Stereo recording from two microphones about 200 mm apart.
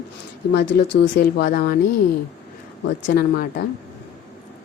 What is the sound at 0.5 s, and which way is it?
Mantra, 60° left (ahead or behind).